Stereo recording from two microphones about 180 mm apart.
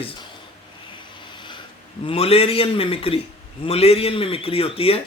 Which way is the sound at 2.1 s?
35° left (ahead or behind).